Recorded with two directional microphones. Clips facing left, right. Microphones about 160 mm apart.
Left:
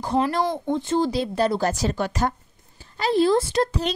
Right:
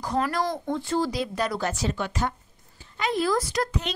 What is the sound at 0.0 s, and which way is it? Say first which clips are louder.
A woman's voice: left 4 dB; 25° left (ahead or behind).